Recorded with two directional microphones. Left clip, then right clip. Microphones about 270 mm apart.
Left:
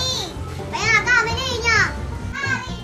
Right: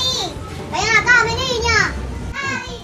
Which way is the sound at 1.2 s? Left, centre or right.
Centre.